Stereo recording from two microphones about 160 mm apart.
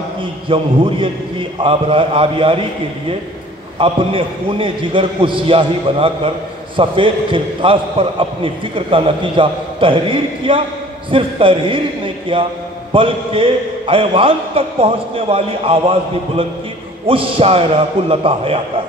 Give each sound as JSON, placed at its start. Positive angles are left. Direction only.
{"t": 0.2, "sound": "a man's voice", "side_deg": -30}
{"t": 3.7, "sound": "a man's voice", "side_deg": -35}